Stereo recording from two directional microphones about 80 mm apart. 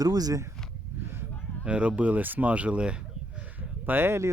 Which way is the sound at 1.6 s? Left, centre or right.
Centre.